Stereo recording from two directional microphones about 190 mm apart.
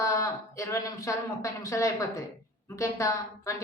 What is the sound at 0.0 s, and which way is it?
A woman's voice, 15° left (ahead or behind).